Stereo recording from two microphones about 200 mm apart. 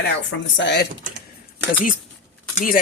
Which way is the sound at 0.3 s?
65° left (ahead or behind).